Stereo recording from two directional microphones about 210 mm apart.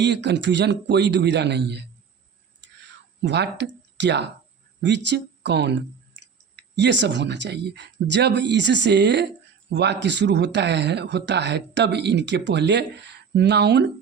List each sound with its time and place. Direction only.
0.0 s speech: 55° right (ahead or behind)
2.6 s a sound: 55° right (ahead or behind)
4.8 s speech: 55° right (ahead or behind)